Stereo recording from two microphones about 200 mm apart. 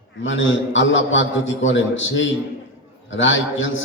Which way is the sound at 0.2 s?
70° left (ahead or behind).